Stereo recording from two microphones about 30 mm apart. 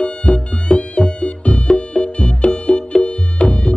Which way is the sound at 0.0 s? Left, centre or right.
Left.